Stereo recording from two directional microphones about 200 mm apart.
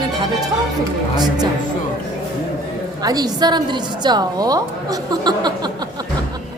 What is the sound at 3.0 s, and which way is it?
A woman's voice, 20° right (ahead or behind).